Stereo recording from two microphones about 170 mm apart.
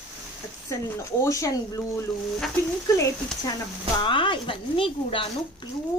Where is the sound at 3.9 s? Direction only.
30° left (ahead or behind).